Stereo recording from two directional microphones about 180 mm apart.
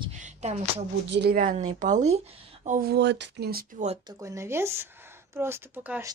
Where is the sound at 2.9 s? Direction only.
75° right (ahead or behind); by 3.8 s 55° right (ahead or behind).